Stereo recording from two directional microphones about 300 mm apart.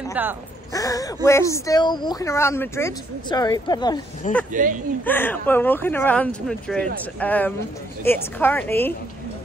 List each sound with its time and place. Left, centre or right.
0.1 s speech: centre
0.7 s speech: centre
4.5 s speech: right
5.0 s speech: centre